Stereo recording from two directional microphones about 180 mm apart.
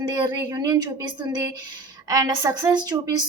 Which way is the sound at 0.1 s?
20° right (ahead or behind).